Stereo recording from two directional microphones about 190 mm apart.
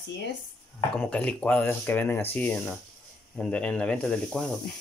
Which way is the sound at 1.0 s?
5° left (ahead or behind).